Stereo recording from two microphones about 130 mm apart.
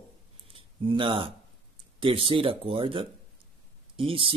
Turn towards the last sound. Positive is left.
turn(degrees=-45)  # may be behind; listen again after turning